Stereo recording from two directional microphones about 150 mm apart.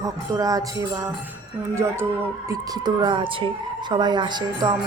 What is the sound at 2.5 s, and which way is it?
A woman's voice, 30° right (ahead or behind).